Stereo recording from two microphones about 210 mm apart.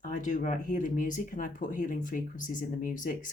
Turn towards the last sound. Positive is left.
turn(degrees=40)  # may be behind; listen again after turning